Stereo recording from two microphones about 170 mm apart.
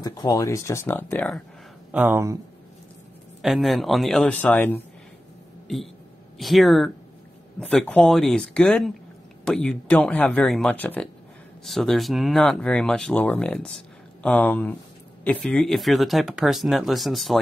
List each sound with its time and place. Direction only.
0.0 s speech: 25° left (ahead or behind)
1.9 s speech: 10° right (ahead or behind)
3.4 s speech: centre (ahead or behind)
6.3 s speech: centre (ahead or behind)